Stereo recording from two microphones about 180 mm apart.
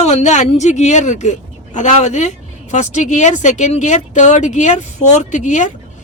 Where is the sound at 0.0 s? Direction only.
40° left (ahead or behind).